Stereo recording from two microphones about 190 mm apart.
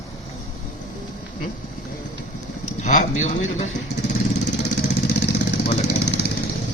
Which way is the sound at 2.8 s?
40° left (ahead or behind).